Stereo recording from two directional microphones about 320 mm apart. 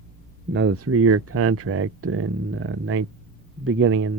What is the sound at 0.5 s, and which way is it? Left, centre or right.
Speech, right.